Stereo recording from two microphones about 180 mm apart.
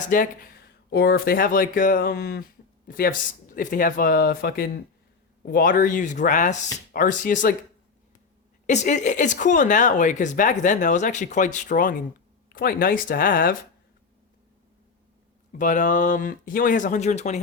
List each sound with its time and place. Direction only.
0.1 s speech: 50° left (ahead or behind)
0.9 s speech: 60° left (ahead or behind); by 7.5 s 45° left (ahead or behind)
8.6 s speech: 40° left (ahead or behind)
15.5 s speech: 45° left (ahead or behind)